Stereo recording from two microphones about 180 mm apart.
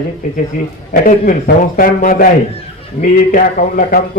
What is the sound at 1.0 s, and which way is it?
A man's voice, 50° left (ahead or behind).